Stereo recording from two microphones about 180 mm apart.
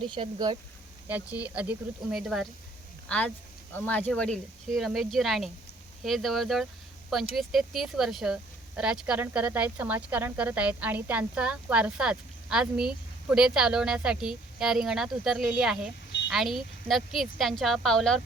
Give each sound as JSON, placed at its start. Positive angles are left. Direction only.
{"t": 0.0, "sound": "speech", "side_deg": -25}
{"t": 1.0, "sound": "speech", "side_deg": -10}